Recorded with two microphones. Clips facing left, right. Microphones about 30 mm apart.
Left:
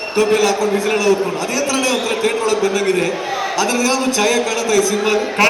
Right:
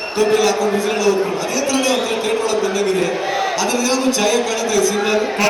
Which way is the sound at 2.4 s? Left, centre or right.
Left.